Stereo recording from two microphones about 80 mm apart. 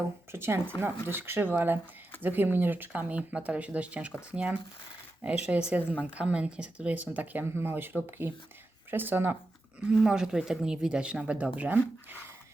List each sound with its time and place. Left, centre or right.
0.3 s speech: right
8.9 s speech: right
10.0 s speech: centre